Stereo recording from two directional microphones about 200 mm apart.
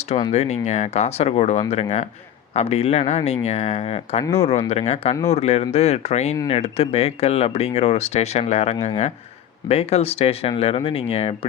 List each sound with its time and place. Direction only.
0.2 s speech: 30° left (ahead or behind)